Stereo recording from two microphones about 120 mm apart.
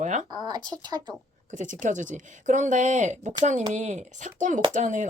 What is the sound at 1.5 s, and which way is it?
Speech, 90° right.